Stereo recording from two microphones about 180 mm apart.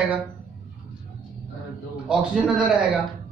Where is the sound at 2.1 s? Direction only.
5° right (ahead or behind).